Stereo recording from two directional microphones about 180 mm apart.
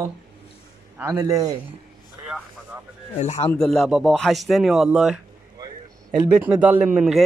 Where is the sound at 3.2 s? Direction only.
40° left (ahead or behind).